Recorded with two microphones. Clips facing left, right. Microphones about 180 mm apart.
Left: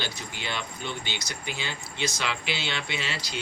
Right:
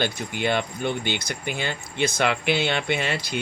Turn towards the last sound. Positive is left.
turn(degrees=-55)  # may be behind; listen again after turning